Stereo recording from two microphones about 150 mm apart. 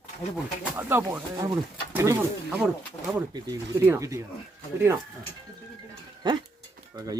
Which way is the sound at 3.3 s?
25° right (ahead or behind).